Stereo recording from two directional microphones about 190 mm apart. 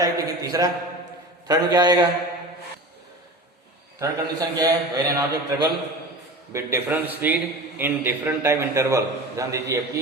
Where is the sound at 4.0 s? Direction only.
20° right (ahead or behind).